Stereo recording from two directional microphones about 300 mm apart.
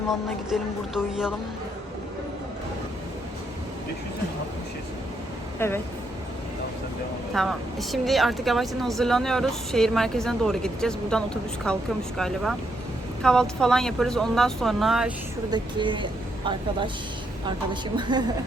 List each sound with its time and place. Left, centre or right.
0.5 s a woman's voice: centre
5.5 s speech: centre
7.3 s a woman's voice: centre
15.4 s speech: centre
17.9 s speech: centre